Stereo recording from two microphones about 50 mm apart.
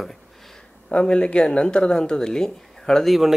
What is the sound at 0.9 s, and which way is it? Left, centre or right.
A man's voice, left.